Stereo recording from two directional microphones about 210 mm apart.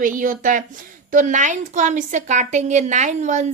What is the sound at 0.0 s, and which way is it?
A woman's voice, 40° right (ahead or behind).